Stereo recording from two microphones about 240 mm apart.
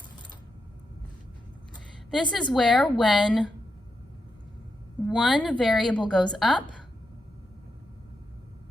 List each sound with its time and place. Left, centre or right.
2.3 s a woman's voice: centre
5.0 s a woman's voice: centre